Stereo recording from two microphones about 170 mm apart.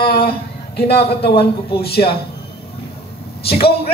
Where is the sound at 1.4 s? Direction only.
35° left (ahead or behind).